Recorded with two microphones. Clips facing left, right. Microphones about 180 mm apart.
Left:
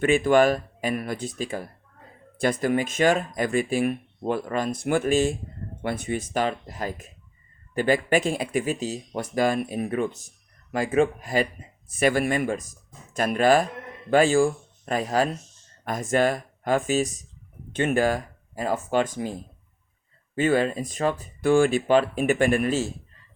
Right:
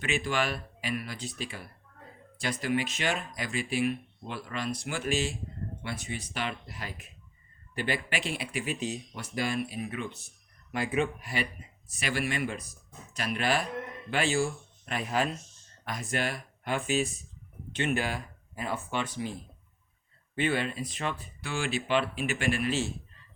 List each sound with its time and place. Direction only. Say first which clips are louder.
0.0 s speech: left 12 dB; 50° left (ahead or behind)